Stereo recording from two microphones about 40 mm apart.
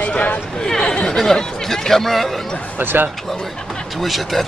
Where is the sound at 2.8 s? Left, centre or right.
Right.